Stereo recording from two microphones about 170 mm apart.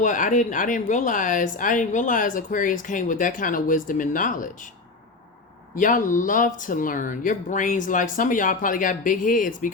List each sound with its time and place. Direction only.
0.0 s speech: 50° left (ahead or behind)
5.7 s speech: 50° left (ahead or behind)